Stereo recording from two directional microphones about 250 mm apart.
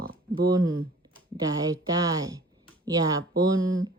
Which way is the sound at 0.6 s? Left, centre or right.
Right.